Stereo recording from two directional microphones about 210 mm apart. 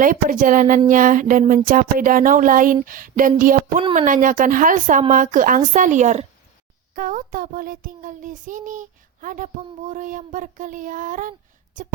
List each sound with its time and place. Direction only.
0.0 s a child's voice: 40° right (ahead or behind)